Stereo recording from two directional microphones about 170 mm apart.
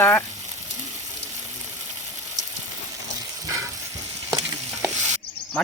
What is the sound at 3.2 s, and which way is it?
Frying, 20° right (ahead or behind).